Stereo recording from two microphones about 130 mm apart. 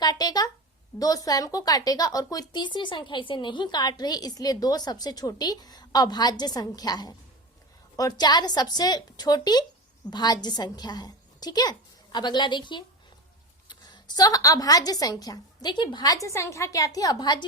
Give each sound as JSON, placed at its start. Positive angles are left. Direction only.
{"t": 0.0, "sound": "a woman's voice", "side_deg": 30}